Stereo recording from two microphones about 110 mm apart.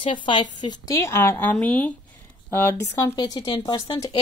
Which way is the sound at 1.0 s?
25° left (ahead or behind).